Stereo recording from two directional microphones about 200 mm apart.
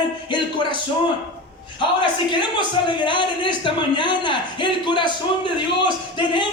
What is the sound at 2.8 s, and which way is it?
A man's voice, 25° left (ahead or behind).